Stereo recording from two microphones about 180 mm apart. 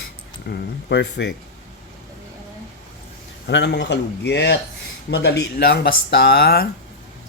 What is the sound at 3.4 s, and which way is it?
Speech, 70° left (ahead or behind).